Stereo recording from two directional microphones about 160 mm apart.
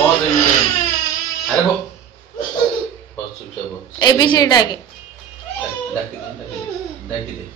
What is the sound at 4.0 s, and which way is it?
Speech, 25° left (ahead or behind).